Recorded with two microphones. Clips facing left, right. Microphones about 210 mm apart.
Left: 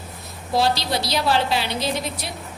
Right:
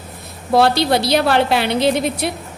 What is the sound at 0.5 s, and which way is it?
A woman's voice, 60° right (ahead or behind).